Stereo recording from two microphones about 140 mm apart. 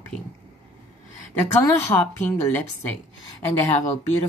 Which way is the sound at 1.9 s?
25° left (ahead or behind).